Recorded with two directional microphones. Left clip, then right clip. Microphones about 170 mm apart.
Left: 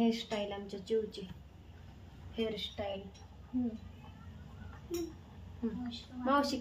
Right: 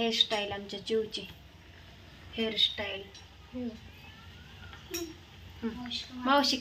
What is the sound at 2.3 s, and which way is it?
Speech, 45° right (ahead or behind).